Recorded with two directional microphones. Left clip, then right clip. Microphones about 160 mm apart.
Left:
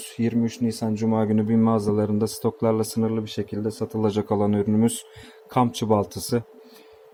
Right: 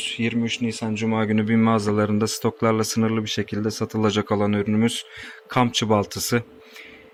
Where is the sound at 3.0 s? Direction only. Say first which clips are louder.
Right 2 dB; 15° right (ahead or behind).